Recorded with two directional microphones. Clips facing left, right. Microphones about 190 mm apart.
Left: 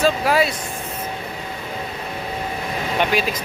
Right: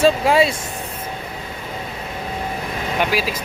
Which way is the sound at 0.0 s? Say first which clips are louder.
Right 3 dB; 25° right (ahead or behind).